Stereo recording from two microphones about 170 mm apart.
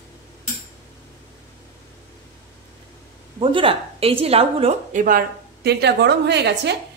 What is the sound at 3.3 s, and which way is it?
A woman's voice, 35° right (ahead or behind).